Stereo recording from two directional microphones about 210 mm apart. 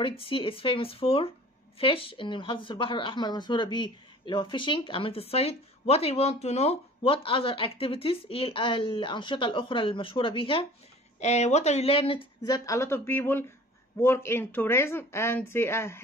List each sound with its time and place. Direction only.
0.2 s speech: 25° left (ahead or behind)